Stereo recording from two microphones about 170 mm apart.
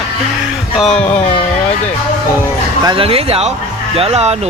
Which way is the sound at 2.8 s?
30° right (ahead or behind).